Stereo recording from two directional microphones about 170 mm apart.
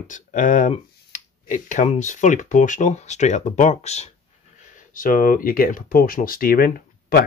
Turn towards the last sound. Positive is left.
turn(degrees=60)  # may be behind; listen again after turning